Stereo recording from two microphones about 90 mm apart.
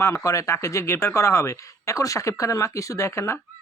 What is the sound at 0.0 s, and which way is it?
A man's voice, 35° left (ahead or behind).